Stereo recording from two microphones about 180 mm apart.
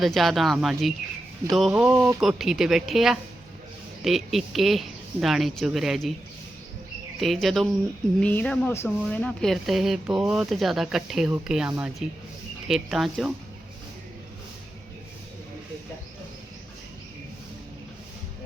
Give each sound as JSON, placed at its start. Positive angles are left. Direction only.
{"t": 0.0, "sound": "speech", "side_deg": 0}
{"t": 7.2, "sound": "speech", "side_deg": 0}